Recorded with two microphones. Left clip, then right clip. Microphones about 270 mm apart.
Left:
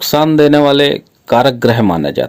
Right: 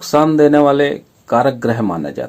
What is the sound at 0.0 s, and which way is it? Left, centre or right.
Speech, left.